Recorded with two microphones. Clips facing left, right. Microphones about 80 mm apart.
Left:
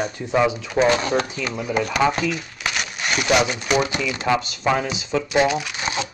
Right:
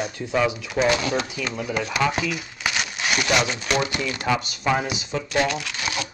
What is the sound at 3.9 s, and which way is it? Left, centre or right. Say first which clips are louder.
Speech: left 3 dB; left.